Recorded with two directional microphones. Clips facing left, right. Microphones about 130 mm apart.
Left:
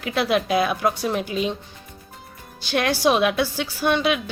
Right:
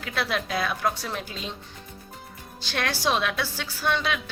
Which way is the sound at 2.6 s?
15° left (ahead or behind).